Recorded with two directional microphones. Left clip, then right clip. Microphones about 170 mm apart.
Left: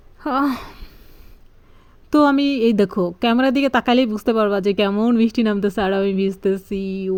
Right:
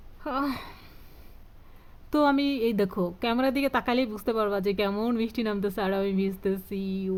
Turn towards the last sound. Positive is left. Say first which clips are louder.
# left 8 dB
turn(degrees=35)  # may be behind; listen again after turning